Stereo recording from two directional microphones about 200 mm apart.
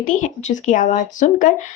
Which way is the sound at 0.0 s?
40° left (ahead or behind).